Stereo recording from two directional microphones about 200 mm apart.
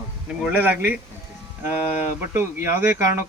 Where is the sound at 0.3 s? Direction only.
5° right (ahead or behind).